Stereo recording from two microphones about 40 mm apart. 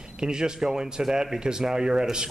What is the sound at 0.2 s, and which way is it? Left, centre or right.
A man's voice, centre.